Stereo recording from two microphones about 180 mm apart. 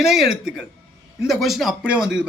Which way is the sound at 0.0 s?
Centre (ahead or behind).